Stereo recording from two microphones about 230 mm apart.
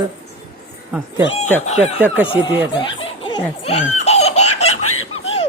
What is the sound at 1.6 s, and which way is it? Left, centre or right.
Speech, left.